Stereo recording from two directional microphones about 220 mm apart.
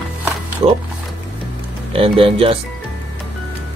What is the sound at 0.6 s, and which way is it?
Speech, 30° right (ahead or behind).